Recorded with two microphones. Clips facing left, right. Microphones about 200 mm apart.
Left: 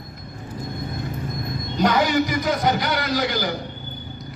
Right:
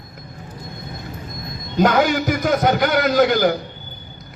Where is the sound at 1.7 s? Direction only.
50° right (ahead or behind).